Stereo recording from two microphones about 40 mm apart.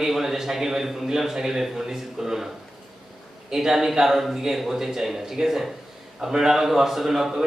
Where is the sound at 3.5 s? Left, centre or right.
Centre.